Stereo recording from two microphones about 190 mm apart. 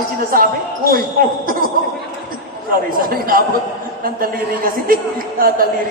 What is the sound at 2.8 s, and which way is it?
Speech, 50° right (ahead or behind).